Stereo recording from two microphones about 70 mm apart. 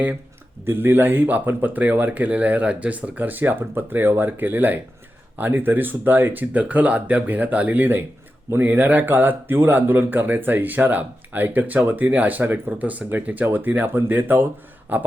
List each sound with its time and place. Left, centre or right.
0.6 s speech: right